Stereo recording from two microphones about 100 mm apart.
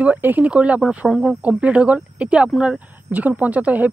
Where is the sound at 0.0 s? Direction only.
15° right (ahead or behind).